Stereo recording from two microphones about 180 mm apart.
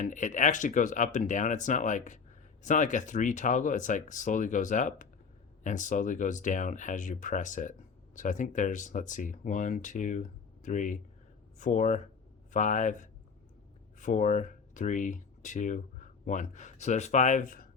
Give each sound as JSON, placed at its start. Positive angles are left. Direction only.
{"t": 0.0, "sound": "speech", "side_deg": 45}